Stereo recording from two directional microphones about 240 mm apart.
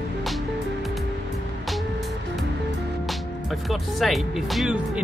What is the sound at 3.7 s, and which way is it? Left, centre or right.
Speech, centre.